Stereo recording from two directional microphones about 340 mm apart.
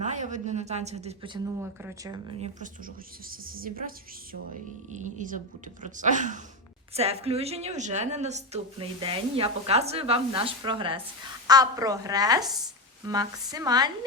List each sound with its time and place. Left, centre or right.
0.0 s a woman's voice: right
3.5 s a woman's voice: right